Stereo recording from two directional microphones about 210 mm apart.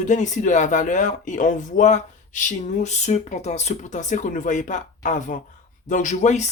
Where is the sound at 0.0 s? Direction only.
35° left (ahead or behind).